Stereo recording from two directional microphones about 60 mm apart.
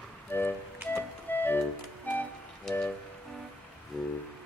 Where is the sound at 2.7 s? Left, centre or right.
Centre.